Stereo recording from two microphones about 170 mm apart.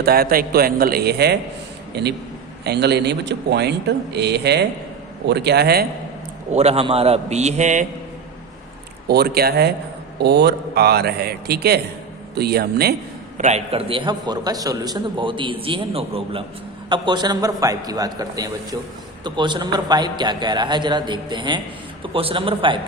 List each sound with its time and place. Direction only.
0.0 s a man's voice: 65° right (ahead or behind)
6.5 s a man's voice: 40° right (ahead or behind)
9.0 s speech: 70° right (ahead or behind)
10.2 s speech: 85° right
13.4 s a man's voice: 40° right (ahead or behind)